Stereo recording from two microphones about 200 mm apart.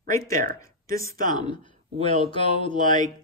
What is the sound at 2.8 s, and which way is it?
Speech, 40° right (ahead or behind).